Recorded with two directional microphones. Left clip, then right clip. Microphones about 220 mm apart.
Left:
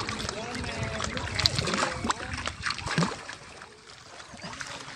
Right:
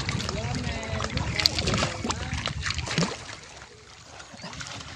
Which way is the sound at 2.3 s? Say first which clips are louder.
Right 1 dB; 5° left (ahead or behind).